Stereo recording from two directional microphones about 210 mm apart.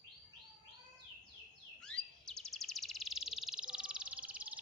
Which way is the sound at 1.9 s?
5° left (ahead or behind).